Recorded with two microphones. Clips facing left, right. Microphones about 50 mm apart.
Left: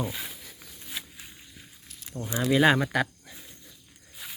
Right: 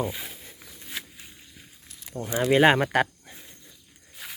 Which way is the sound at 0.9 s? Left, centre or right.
Right.